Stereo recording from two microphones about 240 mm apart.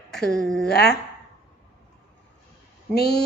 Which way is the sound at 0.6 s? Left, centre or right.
Left.